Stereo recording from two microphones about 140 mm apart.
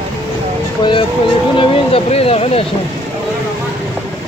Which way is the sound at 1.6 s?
45° left (ahead or behind).